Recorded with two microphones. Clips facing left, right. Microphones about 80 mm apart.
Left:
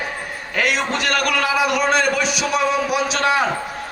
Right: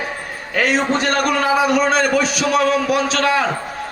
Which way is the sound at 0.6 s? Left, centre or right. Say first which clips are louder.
Right 4 dB; right.